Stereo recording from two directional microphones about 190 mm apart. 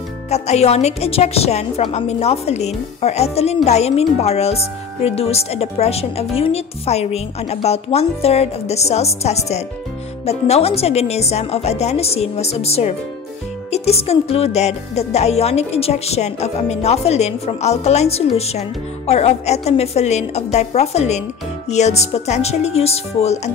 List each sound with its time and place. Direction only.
0.3 s speech: 35° left (ahead or behind)